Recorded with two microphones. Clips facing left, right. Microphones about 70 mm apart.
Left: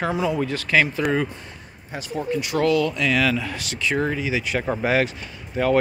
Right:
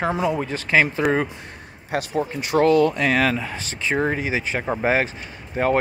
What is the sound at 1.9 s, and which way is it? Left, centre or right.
Speech, right.